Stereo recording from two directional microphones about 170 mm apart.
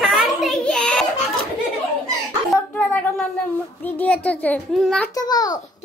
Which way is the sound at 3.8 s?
10° left (ahead or behind).